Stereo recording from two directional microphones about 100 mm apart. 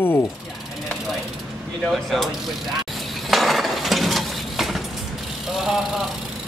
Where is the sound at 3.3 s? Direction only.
Centre (ahead or behind).